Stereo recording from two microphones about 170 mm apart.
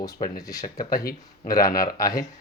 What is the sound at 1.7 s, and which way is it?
Speech, 55° left (ahead or behind).